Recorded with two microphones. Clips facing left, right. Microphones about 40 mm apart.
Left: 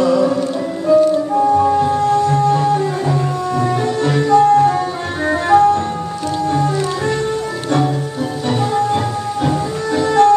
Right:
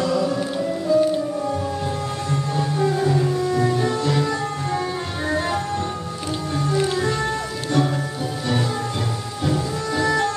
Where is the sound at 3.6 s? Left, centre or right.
Left.